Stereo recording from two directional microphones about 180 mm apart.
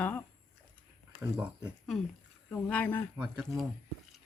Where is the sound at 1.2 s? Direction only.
15° right (ahead or behind).